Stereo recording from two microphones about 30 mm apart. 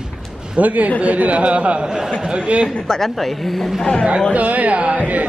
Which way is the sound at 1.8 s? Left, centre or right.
Right.